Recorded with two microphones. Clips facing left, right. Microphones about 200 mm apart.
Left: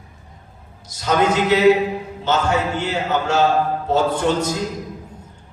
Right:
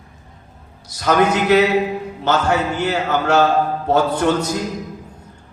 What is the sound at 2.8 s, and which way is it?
A man's voice, 65° right (ahead or behind).